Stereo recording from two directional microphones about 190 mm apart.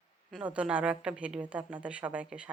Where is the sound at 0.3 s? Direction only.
5° right (ahead or behind).